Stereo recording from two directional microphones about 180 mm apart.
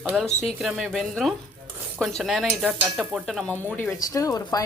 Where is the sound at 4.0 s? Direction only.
15° left (ahead or behind).